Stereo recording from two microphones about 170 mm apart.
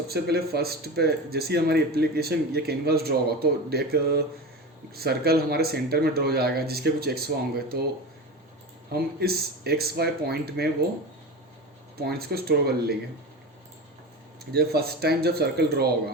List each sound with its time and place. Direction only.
0.1 s speech: 70° right (ahead or behind)
11.9 s speech: 65° right (ahead or behind)
14.5 s speech: 65° right (ahead or behind)